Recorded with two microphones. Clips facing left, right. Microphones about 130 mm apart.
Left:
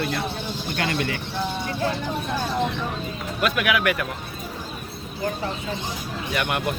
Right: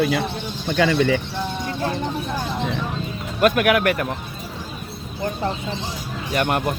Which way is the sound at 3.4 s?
45° right (ahead or behind).